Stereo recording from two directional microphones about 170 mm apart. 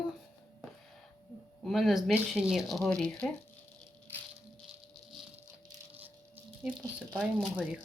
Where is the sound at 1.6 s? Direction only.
Centre (ahead or behind).